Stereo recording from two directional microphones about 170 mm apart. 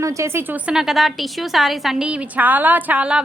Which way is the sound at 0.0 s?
15° right (ahead or behind).